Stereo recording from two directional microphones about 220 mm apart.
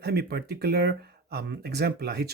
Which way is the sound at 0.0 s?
45° right (ahead or behind).